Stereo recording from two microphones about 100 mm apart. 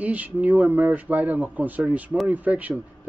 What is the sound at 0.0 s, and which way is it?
Speech, 15° right (ahead or behind).